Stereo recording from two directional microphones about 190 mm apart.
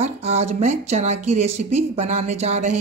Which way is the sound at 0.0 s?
35° right (ahead or behind).